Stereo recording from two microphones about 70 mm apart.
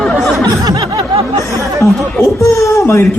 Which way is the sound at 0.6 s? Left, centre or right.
Right.